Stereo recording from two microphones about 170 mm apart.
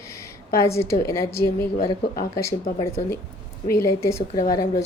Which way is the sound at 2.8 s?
15° left (ahead or behind).